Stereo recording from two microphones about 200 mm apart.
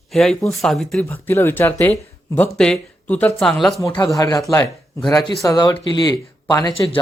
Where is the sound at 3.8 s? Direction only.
15° left (ahead or behind).